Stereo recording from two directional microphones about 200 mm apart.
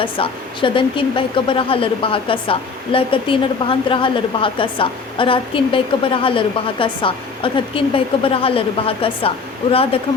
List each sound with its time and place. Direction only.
0.0 s speech: 25° left (ahead or behind)